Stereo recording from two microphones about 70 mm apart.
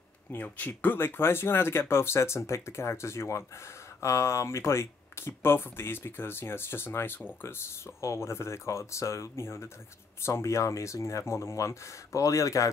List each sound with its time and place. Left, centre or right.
0.3 s speech: left